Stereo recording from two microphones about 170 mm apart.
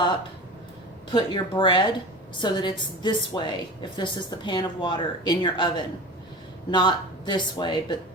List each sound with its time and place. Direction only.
1.1 s speech: 30° left (ahead or behind)